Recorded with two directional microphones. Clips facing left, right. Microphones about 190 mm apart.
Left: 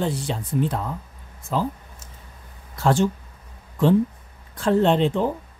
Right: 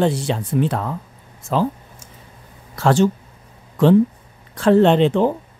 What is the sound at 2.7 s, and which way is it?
Speech, 80° right.